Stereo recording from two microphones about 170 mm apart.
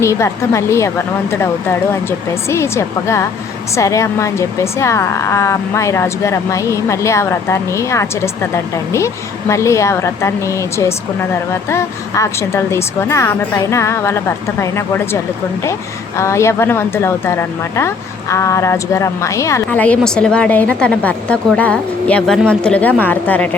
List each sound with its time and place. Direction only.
0.0 s speech: 15° left (ahead or behind)